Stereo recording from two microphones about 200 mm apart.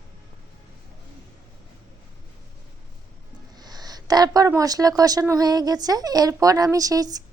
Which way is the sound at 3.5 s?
20° right (ahead or behind).